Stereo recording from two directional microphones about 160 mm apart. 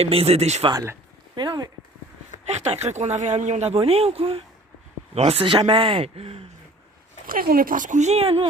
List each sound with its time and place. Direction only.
0.0 s speech: 40° right (ahead or behind)
0.7 s speech: 20° right (ahead or behind)
2.6 s speech: 45° right (ahead or behind)
7.3 s speech: 65° right (ahead or behind); by 8.4 s 35° right (ahead or behind)